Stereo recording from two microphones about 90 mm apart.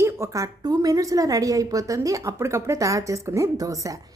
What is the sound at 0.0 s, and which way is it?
A woman's voice, 35° right (ahead or behind).